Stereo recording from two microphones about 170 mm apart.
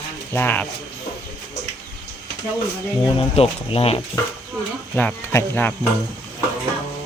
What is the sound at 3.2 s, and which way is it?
Speech, 35° left (ahead or behind).